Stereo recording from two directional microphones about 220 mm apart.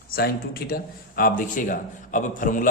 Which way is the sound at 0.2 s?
45° left (ahead or behind).